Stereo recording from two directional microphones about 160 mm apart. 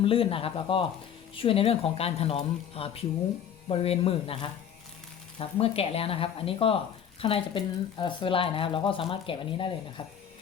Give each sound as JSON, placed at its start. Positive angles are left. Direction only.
{"t": 0.0, "sound": "speech", "side_deg": 35}